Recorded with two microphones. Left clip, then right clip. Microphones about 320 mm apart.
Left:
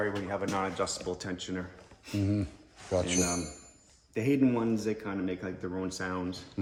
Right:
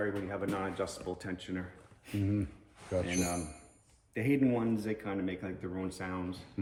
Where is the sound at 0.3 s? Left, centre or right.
Left.